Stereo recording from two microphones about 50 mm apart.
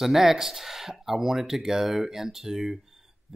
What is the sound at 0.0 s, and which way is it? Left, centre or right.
Speech, centre.